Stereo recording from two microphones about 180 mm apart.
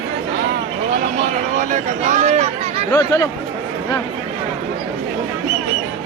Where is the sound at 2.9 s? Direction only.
15° left (ahead or behind).